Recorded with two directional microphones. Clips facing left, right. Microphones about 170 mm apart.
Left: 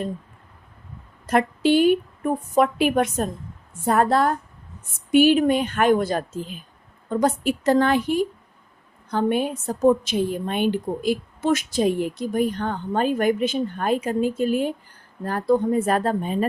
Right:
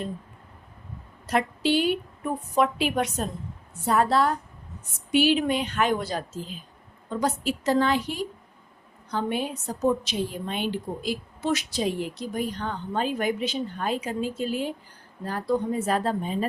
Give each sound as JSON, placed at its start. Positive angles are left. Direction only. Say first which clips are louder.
{"t": 1.3, "sound": "a woman's voice", "louder": "left 5 dB", "side_deg": 50}